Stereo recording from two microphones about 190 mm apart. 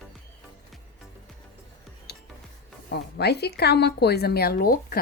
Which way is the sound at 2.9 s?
60° left (ahead or behind).